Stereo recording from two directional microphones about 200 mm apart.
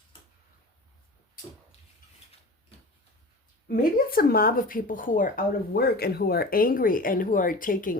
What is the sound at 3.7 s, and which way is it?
Speech, 45° left (ahead or behind).